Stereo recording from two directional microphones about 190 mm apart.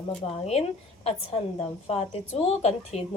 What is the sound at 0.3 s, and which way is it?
Speech, 35° left (ahead or behind).